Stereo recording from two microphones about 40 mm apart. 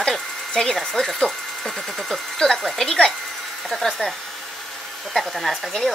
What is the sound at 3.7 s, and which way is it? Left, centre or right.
Hair dryer, centre.